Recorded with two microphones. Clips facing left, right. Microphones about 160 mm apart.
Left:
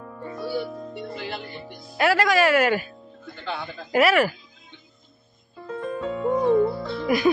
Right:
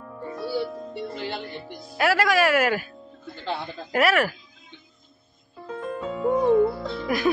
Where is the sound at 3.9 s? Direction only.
Centre (ahead or behind).